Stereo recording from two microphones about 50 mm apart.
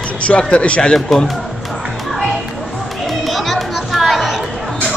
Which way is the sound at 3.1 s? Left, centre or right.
Centre.